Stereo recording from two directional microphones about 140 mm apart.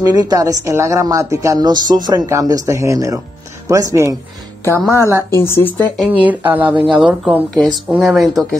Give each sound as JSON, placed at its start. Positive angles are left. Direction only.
{"t": 0.0, "sound": "a woman's voice", "side_deg": -25}
{"t": 5.3, "sound": "speech", "side_deg": 15}
{"t": 6.0, "sound": "speech", "side_deg": -10}